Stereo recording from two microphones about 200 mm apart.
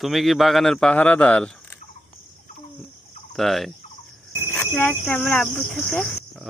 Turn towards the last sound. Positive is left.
turn(degrees=5)  # may be behind; listen again after turning